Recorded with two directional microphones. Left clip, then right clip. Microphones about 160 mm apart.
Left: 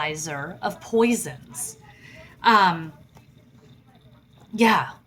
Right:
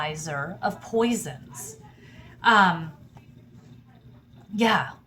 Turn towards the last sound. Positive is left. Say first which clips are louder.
# left 3 dB
turn(degrees=30)  # may be behind; listen again after turning